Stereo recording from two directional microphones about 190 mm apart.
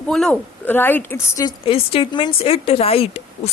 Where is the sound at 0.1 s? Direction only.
5° left (ahead or behind).